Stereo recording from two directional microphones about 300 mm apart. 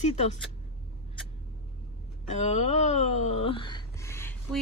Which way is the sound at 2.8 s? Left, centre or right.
Left.